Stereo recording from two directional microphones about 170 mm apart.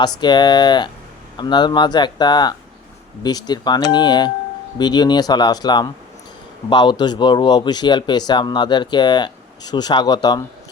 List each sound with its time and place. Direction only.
0.2 s speech: 25° left (ahead or behind)